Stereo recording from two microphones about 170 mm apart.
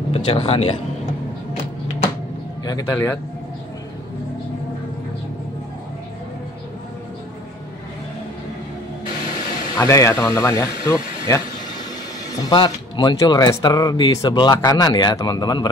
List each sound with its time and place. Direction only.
0.1 s speech: 35° left (ahead or behind)
2.6 s speech: 25° left (ahead or behind)
9.8 s speech: 20° left (ahead or behind)
12.4 s speech: 25° left (ahead or behind)